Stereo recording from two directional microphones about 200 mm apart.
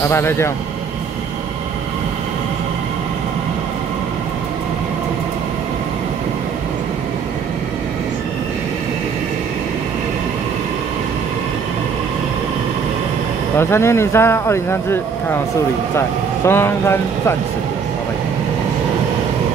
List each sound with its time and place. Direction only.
0.1 s speech: 10° left (ahead or behind)
13.6 s speech: 10° left (ahead or behind)
16.4 s speech: 10° left (ahead or behind)